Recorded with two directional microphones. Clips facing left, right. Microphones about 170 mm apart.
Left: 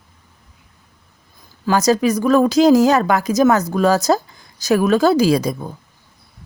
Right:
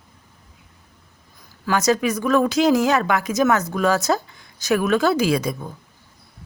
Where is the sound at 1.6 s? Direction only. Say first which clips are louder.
Left 4 dB; 35° left (ahead or behind).